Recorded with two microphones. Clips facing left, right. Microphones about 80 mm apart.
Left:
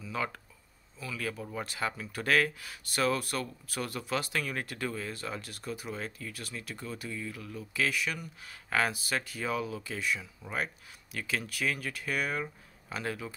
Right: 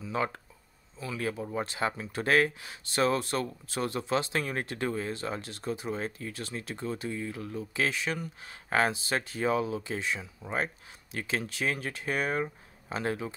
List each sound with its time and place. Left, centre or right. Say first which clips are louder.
0.0 s speech: right 4 dB; right